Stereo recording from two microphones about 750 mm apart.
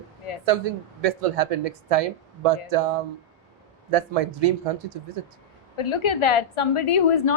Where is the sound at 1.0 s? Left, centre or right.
Right.